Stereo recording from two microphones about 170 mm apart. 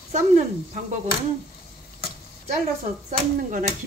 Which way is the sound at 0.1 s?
50° right (ahead or behind).